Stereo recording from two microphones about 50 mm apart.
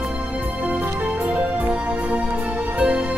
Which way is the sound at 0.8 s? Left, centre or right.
Right.